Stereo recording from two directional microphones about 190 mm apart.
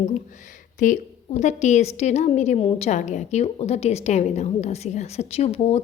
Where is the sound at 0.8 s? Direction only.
40° left (ahead or behind).